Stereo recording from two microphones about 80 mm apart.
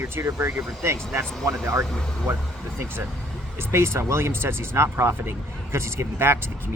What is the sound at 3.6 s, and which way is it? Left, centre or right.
Speech, right.